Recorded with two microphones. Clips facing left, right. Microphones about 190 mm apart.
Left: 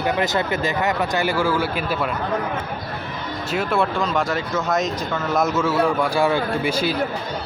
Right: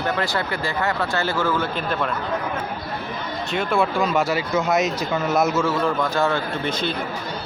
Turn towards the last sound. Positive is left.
turn(degrees=10)  # may be behind; listen again after turning